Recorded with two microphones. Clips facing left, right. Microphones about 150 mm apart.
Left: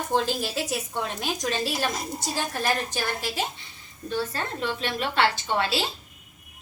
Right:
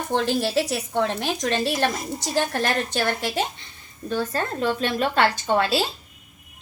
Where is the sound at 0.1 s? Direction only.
70° right (ahead or behind).